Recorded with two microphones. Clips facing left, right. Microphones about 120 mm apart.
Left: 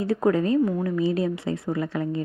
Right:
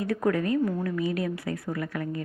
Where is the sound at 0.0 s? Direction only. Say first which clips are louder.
Left 4 dB; 25° left (ahead or behind).